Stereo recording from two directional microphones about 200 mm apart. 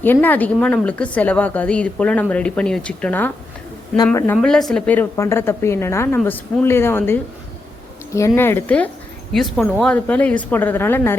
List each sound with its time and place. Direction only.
0.0 s a woman's voice: 10° left (ahead or behind)
4.4 s a woman's voice: centre (ahead or behind)
8.4 s a woman's voice: 10° left (ahead or behind)